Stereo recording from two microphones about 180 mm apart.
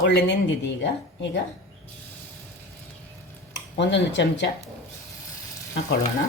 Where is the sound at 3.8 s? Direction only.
80° left.